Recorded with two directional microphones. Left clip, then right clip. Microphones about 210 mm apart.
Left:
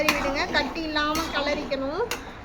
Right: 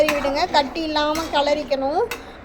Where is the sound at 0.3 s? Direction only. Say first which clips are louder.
Right 6 dB; 20° right (ahead or behind).